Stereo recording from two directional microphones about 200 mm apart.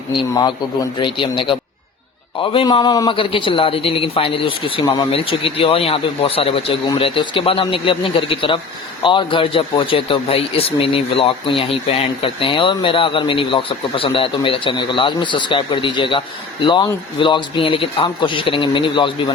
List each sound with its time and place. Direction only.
0.9 s speech: 25° left (ahead or behind)